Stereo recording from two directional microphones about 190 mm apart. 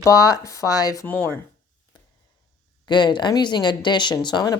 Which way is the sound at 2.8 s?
25° left (ahead or behind).